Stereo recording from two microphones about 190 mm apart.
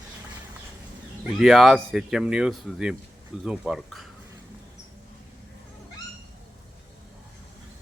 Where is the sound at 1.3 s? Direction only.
Centre (ahead or behind).